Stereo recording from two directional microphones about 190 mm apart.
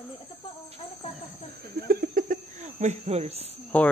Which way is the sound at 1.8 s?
55° right (ahead or behind).